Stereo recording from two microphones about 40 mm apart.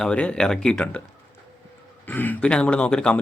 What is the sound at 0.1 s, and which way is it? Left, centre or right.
Speech, left.